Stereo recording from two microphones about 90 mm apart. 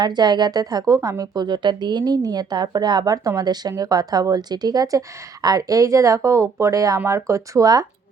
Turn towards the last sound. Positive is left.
turn(degrees=-40)  # may be behind; listen again after turning